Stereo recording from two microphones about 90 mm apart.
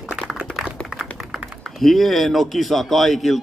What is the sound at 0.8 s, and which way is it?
Speech, 5° right (ahead or behind).